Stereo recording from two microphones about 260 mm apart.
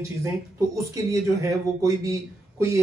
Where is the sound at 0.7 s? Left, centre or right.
Centre.